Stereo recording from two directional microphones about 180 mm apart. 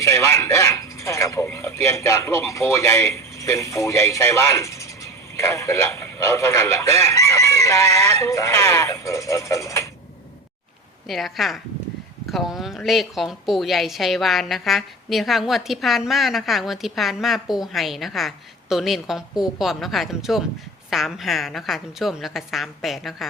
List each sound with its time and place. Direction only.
0.0 s speech: 15° left (ahead or behind)
7.1 s chicken: 15° left (ahead or behind)
8.2 s speech: 15° left (ahead or behind)
11.1 s a woman's voice: centre (ahead or behind)